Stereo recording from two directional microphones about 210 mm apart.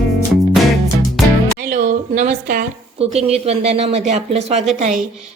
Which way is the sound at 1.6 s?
40° right (ahead or behind).